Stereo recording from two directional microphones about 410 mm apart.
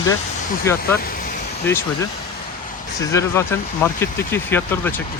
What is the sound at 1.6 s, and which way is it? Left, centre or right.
Speech, centre.